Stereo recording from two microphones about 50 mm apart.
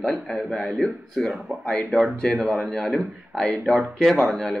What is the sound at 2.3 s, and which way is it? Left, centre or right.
A man's voice, centre.